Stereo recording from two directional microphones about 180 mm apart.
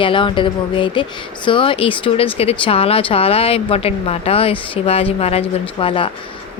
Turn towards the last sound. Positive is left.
turn(degrees=30)  # may be behind; listen again after turning